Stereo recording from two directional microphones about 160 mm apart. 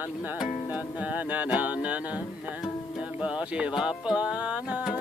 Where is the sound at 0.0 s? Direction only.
10° right (ahead or behind).